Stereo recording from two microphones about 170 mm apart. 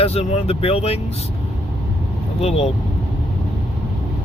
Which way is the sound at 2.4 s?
35° left (ahead or behind).